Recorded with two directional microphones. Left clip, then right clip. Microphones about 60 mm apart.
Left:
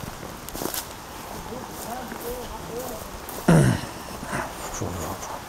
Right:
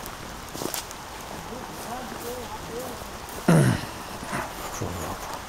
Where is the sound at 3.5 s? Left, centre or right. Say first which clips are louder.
Left 1 dB; centre.